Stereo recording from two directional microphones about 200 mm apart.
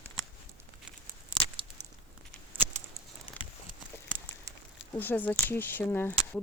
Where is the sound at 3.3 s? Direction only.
25° left (ahead or behind).